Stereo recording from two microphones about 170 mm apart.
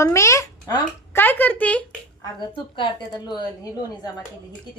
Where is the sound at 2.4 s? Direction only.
25° left (ahead or behind).